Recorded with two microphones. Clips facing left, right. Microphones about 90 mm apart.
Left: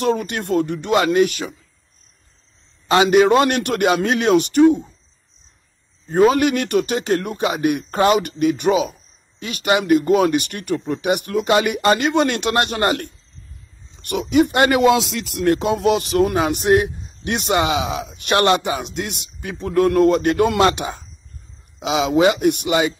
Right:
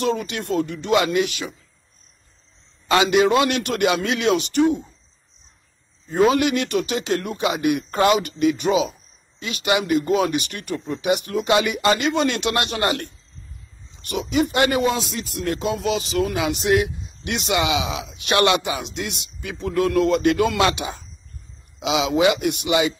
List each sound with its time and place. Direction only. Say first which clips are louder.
0.0 s speech: left 3 dB; 50° left (ahead or behind)
2.9 s a man's voice: left 3 dB; 35° left (ahead or behind)
3.2 s speech: left 3 dB; 50° left (ahead or behind)
6.0 s speech: left 3 dB; 45° left (ahead or behind)
8.2 s speech: left 1 dB; 50° left (ahead or behind)
14.8 s speech: left 6 dB; 90° left; by 22.9 s 45° left (ahead or behind)